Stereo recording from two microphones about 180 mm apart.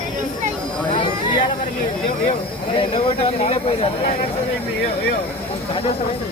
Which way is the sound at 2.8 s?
30° left (ahead or behind).